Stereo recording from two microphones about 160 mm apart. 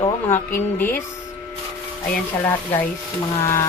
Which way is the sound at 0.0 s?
15° left (ahead or behind).